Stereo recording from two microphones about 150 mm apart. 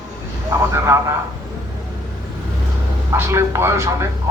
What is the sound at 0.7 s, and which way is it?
Speech, 20° right (ahead or behind).